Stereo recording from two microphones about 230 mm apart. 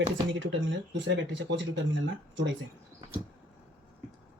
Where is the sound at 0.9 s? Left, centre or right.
Right.